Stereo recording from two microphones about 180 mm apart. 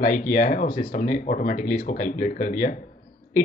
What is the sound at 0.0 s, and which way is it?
Speech, 50° left (ahead or behind).